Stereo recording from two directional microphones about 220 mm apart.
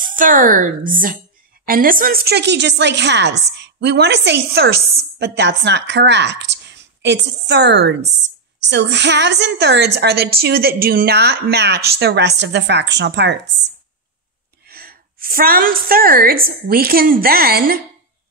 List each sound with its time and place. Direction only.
0.0 s a woman's voice: 40° right (ahead or behind)
14.7 s a woman's voice: 45° right (ahead or behind)